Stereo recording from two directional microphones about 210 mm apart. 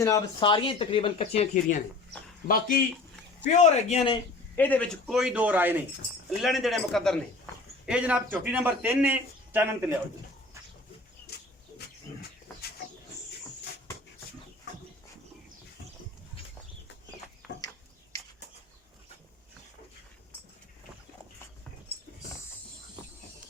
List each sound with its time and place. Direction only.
0.0 s speech: 20° left (ahead or behind)
2.5 s a man's voice: 40° left (ahead or behind)
4.5 s a man's voice: 10° left (ahead or behind); by 9.9 s 10° right (ahead or behind)